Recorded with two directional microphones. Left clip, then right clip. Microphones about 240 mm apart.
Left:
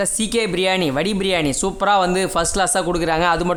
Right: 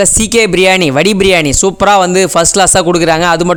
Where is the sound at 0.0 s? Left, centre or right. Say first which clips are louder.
Right 11 dB; right.